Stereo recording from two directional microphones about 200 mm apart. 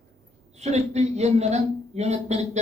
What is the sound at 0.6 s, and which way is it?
A man's voice, 35° right (ahead or behind).